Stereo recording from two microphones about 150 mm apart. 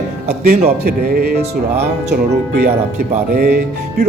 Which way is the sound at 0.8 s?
90° right.